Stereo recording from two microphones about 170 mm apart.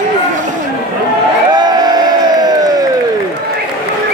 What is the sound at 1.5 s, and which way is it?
Crowd, 25° right (ahead or behind).